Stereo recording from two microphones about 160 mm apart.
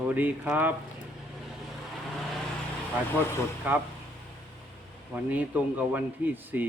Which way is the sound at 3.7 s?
10° right (ahead or behind).